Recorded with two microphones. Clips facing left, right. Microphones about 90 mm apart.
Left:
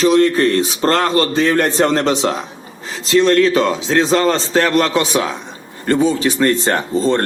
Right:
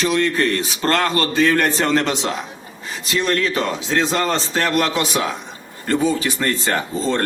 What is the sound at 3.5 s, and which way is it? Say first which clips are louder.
Speech: left 6 dB; 90° left.